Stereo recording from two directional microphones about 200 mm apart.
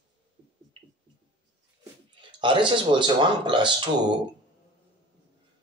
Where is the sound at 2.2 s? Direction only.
25° right (ahead or behind).